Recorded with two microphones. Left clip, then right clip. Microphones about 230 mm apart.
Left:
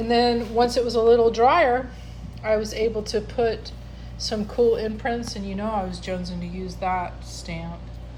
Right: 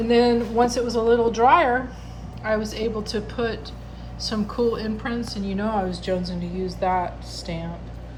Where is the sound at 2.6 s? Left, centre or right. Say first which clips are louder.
Left 2 dB; left.